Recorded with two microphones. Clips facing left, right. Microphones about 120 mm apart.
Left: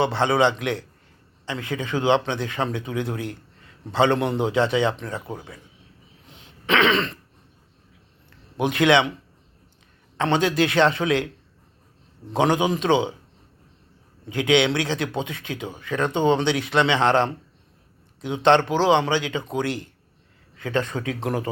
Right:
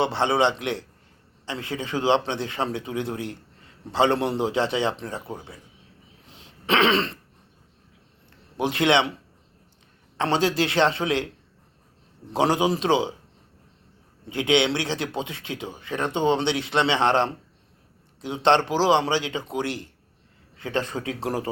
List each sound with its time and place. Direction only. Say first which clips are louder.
0.0 s speech: left 2 dB; 25° right (ahead or behind)
6.2 s throat clearing: left 1 dB; 30° right (ahead or behind)
8.5 s speech: left 2 dB; 30° right (ahead or behind)
10.2 s speech: left 2 dB; 30° right (ahead or behind)
12.3 s a man's voice: left 1 dB; 30° right (ahead or behind)
14.3 s speech: left 2 dB; 25° right (ahead or behind)
20.6 s speech: left 2 dB; 30° right (ahead or behind)